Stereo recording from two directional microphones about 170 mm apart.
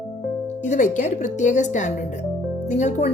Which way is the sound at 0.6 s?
45° left (ahead or behind).